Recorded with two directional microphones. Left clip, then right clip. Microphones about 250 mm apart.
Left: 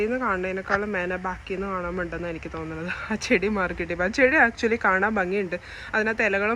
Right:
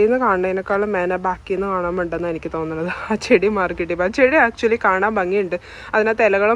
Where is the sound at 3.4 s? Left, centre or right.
Centre.